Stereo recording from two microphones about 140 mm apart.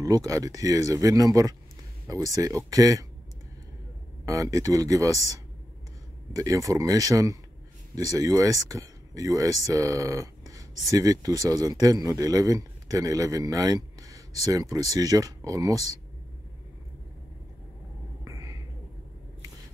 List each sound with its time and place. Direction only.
0.0 s speech: 25° right (ahead or behind)
4.3 s speech: 25° right (ahead or behind)
18.2 s a sound: 25° right (ahead or behind)